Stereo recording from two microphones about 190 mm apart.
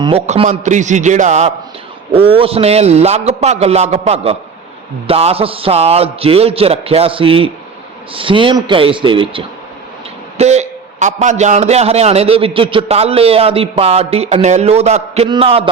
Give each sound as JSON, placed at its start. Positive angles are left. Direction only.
{"t": 0.0, "sound": "a man's voice", "side_deg": -30}